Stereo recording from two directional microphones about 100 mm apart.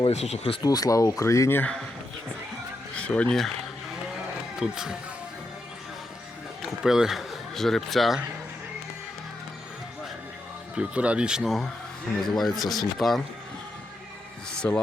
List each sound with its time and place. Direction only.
0.0 s speech: 90° left
0.6 s speech: 40° left (ahead or behind); by 1.7 s 20° left (ahead or behind)
2.9 s speech: 10° left (ahead or behind)
4.5 s speech: 5° right (ahead or behind)
6.6 s speech: 5° right (ahead or behind)
10.8 s speech: 10° right (ahead or behind)
14.6 s speech: 20° left (ahead or behind)